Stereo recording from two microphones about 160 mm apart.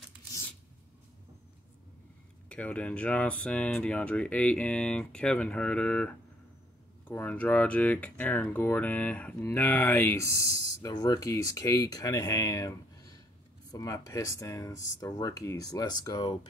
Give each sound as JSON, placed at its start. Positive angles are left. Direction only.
{"t": 2.5, "sound": "speech", "side_deg": 10}